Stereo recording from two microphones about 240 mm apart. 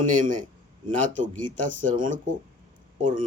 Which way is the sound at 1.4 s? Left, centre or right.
Right.